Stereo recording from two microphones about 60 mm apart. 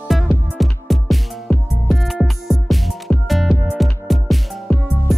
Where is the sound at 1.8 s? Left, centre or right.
Centre.